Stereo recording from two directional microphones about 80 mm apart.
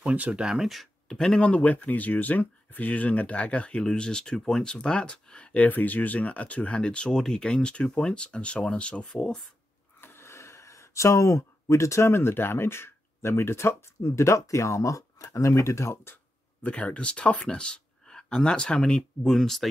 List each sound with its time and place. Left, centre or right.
0.0 s speech: centre
9.9 s speech: left
16.6 s speech: centre